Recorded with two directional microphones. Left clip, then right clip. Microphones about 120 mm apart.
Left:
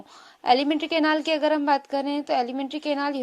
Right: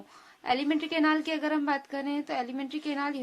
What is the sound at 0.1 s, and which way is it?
A woman's voice, 50° left (ahead or behind).